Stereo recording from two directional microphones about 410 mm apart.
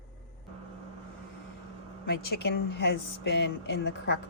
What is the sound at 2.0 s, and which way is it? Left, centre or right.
Speech, left.